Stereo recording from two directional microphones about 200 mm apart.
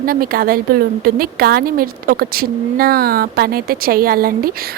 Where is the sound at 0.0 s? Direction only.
45° right (ahead or behind).